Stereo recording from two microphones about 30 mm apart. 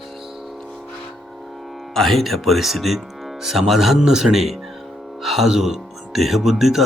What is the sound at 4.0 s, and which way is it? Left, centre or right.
Speech, centre.